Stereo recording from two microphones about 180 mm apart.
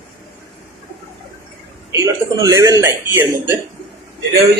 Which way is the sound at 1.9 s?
20° right (ahead or behind).